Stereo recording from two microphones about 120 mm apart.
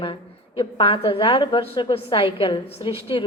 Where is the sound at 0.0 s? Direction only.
45° left (ahead or behind).